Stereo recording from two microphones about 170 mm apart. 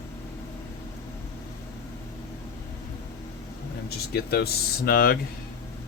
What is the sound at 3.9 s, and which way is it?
Speech, 70° left (ahead or behind).